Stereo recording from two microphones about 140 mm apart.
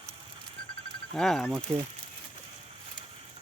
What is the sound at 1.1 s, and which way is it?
Speech, 5° left (ahead or behind).